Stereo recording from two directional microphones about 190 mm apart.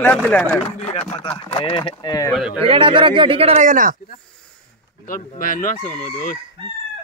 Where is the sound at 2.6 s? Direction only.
30° right (ahead or behind); by 4.0 s 45° right (ahead or behind).